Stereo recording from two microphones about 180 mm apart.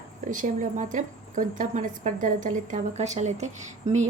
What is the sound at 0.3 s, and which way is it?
A woman's voice, 45° right (ahead or behind).